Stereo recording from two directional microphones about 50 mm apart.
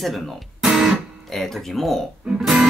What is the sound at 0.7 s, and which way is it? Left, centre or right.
Music, centre.